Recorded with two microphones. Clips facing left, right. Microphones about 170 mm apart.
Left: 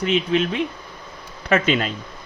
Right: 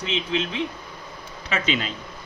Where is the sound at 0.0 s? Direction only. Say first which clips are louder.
Left 7 dB; 55° left (ahead or behind).